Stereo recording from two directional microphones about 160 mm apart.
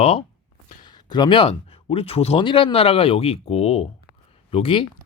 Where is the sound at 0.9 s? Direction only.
25° left (ahead or behind).